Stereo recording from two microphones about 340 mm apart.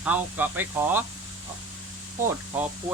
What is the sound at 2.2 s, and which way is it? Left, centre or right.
Speech, centre.